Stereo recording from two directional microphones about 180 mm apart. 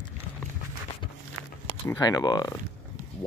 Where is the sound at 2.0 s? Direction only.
20° left (ahead or behind).